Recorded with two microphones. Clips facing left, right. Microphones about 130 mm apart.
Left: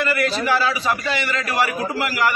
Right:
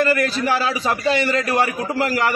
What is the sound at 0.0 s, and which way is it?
A man's voice, 40° right (ahead or behind).